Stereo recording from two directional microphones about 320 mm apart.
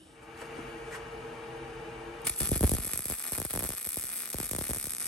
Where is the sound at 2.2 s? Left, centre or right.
Centre.